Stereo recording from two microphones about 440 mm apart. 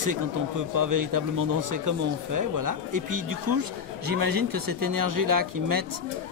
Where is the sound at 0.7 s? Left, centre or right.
Right.